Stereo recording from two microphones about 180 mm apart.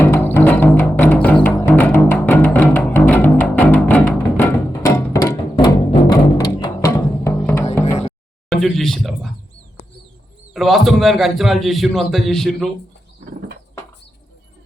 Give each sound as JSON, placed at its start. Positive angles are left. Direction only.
{"t": 0.0, "sound": "music", "side_deg": 10}
{"t": 8.4, "sound": "speech", "side_deg": 0}
{"t": 10.5, "sound": "a man's voice", "side_deg": 0}